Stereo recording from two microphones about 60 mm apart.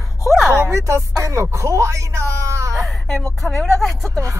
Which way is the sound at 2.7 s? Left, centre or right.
Centre.